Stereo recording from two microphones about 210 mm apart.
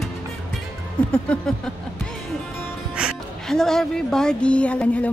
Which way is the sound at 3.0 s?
Centre (ahead or behind).